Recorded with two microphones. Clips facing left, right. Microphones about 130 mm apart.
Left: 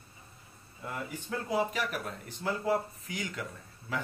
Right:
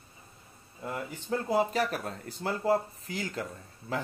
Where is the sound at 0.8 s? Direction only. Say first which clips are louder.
Right 2 dB; 30° right (ahead or behind).